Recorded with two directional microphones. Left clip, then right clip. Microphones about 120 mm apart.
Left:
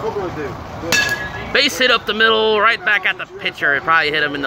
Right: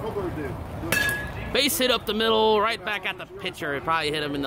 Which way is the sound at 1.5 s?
25° right (ahead or behind).